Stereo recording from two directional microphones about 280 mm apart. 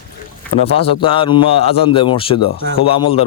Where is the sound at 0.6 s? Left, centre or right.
Left.